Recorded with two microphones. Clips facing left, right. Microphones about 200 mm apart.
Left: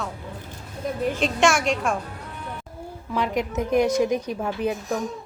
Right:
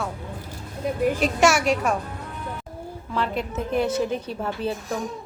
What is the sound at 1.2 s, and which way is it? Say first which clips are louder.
Speech: left 1 dB; 5° right (ahead or behind).